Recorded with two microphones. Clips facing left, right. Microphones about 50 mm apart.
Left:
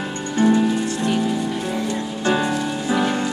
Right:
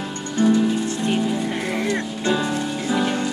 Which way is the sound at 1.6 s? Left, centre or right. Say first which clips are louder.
Right 1 dB; right.